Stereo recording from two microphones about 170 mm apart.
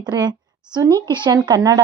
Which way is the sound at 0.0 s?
25° right (ahead or behind).